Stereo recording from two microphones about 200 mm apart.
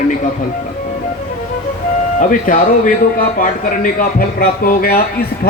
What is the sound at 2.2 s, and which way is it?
A man's voice, 40° left (ahead or behind).